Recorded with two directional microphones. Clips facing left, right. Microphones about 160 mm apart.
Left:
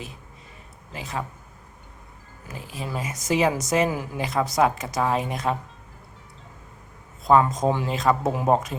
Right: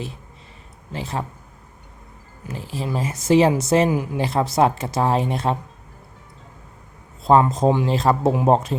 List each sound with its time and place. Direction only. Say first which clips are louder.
0.9 s speech: right 4 dB; 30° right (ahead or behind)
2.5 s speech: right 6 dB; 30° right (ahead or behind)
7.3 s speech: right 3 dB; 30° right (ahead or behind)